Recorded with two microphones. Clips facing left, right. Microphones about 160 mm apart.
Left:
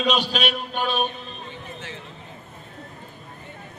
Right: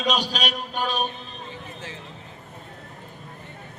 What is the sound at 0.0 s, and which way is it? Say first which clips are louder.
A man's voice: left 2 dB; 40° right (ahead or behind).